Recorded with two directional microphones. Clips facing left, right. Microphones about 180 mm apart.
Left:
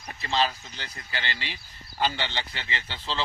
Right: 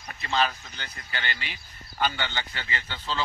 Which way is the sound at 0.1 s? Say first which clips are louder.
Even; 30° left (ahead or behind).